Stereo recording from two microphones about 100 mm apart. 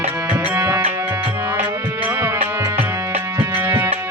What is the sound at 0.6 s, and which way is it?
Music, 30° right (ahead or behind).